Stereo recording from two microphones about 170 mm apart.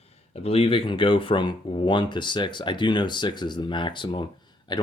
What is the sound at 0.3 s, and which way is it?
Speech, 35° left (ahead or behind).